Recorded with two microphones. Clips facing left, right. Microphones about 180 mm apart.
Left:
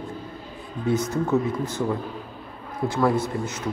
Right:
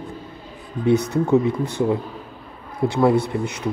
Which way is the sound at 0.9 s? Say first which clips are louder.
Right 5 dB; 65° right (ahead or behind).